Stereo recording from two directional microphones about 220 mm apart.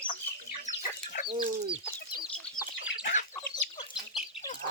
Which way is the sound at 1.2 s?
25° right (ahead or behind).